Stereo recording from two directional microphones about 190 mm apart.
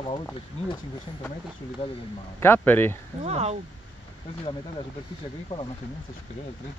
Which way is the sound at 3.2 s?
35° right (ahead or behind).